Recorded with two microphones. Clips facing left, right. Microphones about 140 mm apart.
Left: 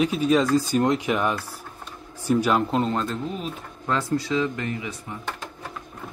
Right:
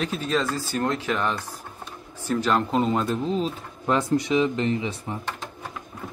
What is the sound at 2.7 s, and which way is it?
Speech, 5° right (ahead or behind).